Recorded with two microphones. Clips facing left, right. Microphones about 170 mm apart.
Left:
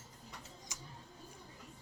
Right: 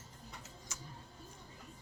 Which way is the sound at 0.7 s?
15° left (ahead or behind).